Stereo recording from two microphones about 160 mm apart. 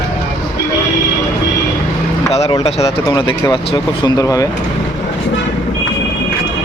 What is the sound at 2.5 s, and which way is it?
Speech, 40° left (ahead or behind).